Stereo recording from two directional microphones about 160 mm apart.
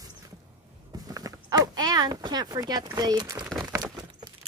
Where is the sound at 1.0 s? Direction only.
20° right (ahead or behind).